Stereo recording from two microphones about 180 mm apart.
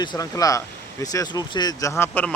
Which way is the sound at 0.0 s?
20° left (ahead or behind).